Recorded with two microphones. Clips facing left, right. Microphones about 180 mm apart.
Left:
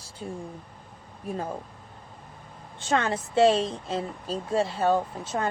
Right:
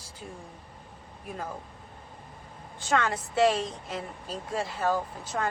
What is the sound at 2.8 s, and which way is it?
A woman's voice, 25° left (ahead or behind).